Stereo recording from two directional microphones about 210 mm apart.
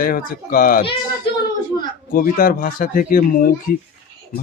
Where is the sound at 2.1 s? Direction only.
45° left (ahead or behind).